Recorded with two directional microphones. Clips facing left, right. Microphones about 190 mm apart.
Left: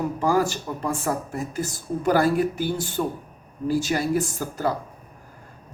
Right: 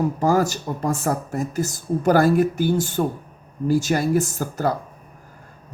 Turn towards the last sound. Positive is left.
turn(degrees=-45)  # may be behind; listen again after turning